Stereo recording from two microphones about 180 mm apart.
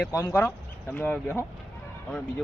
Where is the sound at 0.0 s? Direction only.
15° left (ahead or behind).